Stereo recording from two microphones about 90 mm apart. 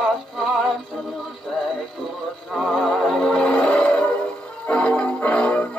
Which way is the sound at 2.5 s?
Centre (ahead or behind).